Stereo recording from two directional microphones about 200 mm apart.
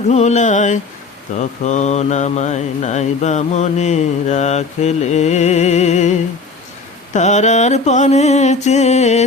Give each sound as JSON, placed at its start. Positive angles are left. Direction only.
{"t": 0.1, "sound": "mantra", "side_deg": 35}